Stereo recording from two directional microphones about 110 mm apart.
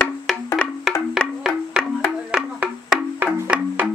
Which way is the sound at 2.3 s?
10° right (ahead or behind).